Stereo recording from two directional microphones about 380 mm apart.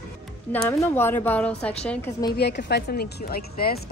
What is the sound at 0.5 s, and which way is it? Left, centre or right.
A woman's voice, centre.